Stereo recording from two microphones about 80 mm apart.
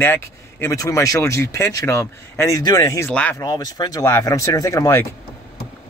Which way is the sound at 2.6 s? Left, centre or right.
Left.